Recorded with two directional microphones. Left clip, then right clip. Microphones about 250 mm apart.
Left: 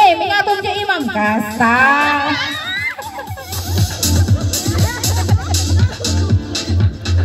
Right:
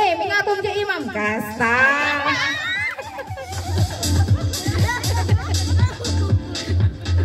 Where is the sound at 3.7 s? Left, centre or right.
Left.